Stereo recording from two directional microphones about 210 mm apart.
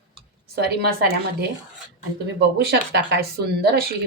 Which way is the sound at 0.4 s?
50° right (ahead or behind).